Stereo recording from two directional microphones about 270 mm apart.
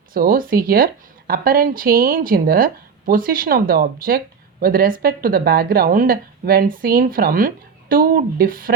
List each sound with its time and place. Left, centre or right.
0.1 s speech: right